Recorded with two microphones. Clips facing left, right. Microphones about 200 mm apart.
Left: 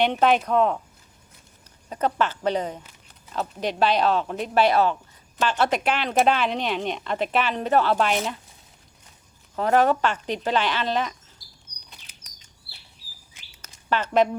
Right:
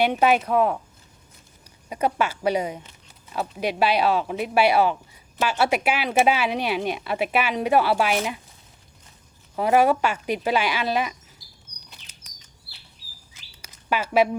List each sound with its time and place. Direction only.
0.0 s speech: 5° right (ahead or behind)
1.9 s speech: 10° right (ahead or behind)
9.6 s speech: 10° right (ahead or behind)
13.6 s a sound: 10° right (ahead or behind)